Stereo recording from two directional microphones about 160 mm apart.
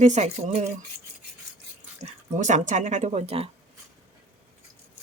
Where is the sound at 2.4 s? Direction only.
50° right (ahead or behind).